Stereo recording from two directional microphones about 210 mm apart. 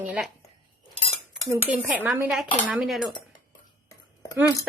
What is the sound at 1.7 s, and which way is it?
Speech, 5° right (ahead or behind).